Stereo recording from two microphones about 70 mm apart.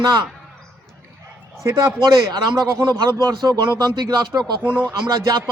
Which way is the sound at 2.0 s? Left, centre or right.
Right.